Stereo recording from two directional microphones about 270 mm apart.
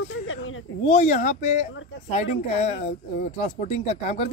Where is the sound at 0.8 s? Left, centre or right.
Left.